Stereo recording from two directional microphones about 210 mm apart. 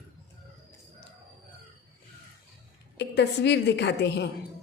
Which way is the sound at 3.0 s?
55° left (ahead or behind).